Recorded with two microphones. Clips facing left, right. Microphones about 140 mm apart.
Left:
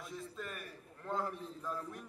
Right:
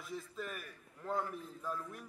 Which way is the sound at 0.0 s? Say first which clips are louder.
Right 1 dB; centre (ahead or behind).